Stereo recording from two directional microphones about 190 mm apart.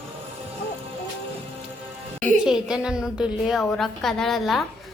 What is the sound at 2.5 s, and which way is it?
A woman's voice, 5° right (ahead or behind).